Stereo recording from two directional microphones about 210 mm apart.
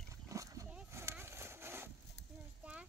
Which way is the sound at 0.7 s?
10° right (ahead or behind).